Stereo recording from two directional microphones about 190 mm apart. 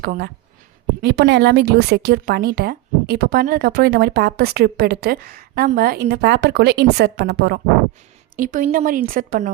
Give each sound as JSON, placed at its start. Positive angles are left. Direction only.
{"t": 0.0, "sound": "speech", "side_deg": -50}
{"t": 8.4, "sound": "speech", "side_deg": -45}